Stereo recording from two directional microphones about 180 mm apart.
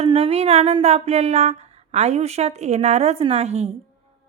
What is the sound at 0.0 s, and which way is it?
A woman's voice, 35° right (ahead or behind).